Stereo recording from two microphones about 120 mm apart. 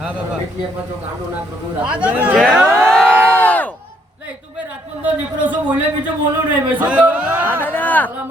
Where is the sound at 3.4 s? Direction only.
10° left (ahead or behind).